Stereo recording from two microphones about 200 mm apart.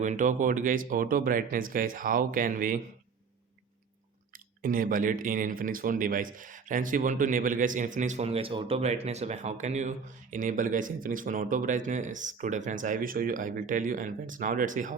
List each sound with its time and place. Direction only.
0.0 s speech: 40° right (ahead or behind)
4.6 s speech: 45° right (ahead or behind)